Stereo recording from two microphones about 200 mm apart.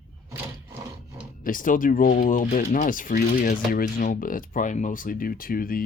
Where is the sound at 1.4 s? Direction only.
45° left (ahead or behind).